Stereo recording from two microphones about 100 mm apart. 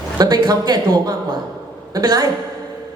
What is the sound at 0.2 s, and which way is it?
A woman's voice, 45° right (ahead or behind).